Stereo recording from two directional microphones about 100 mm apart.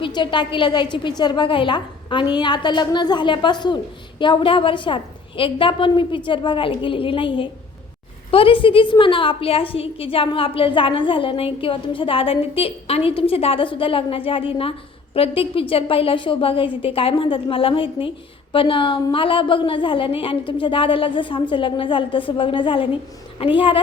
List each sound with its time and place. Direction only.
0.0 s a woman's voice: 50° left (ahead or behind)
8.3 s a woman's voice: 65° left (ahead or behind)